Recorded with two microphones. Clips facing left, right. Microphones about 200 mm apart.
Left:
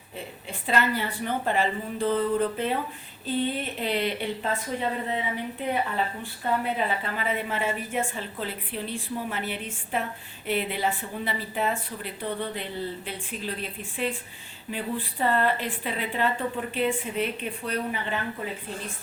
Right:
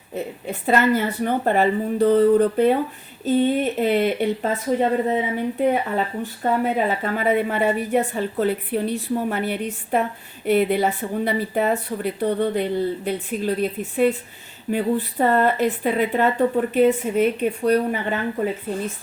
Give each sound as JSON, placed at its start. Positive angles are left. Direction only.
{"t": 0.1, "sound": "a woman's voice", "side_deg": -50}